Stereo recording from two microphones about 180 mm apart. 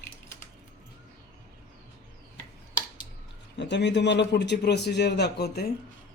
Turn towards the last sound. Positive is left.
turn(degrees=65)  # may be behind; listen again after turning